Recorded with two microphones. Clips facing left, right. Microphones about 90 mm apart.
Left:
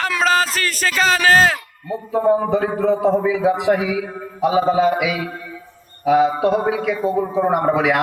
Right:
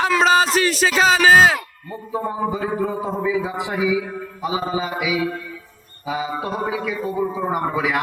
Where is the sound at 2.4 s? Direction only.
70° left (ahead or behind).